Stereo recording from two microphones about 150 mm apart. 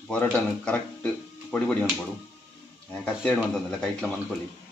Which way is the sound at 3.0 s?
5° left (ahead or behind).